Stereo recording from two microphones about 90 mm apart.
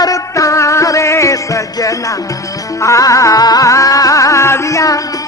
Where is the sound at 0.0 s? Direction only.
40° left (ahead or behind).